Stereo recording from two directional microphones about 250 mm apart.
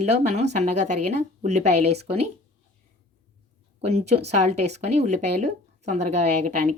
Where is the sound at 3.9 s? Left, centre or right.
Right.